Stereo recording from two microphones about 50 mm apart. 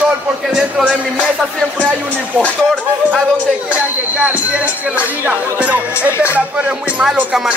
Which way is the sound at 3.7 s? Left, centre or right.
Right.